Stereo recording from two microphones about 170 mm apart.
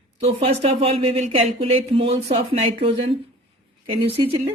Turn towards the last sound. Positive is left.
turn(degrees=-35)  # may be behind; listen again after turning